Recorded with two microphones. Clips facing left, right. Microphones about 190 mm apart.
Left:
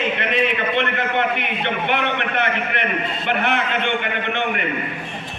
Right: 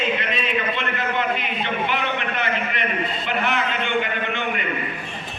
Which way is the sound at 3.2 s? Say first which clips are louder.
Left 4 dB; 60° left (ahead or behind).